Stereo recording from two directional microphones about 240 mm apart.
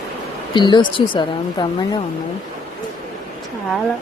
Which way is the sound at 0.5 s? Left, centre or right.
Centre.